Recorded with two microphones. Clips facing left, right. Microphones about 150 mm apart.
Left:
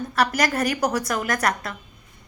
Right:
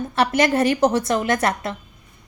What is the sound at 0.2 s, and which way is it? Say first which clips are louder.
A woman's voice: right 4 dB; 25° right (ahead or behind).